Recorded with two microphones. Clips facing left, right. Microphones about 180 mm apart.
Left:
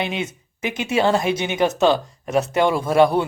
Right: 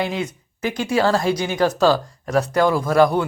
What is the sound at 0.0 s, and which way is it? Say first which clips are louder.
Speech: right 1 dB; 25° left (ahead or behind).